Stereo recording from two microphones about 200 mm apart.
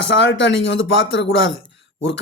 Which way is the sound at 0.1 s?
60° left (ahead or behind).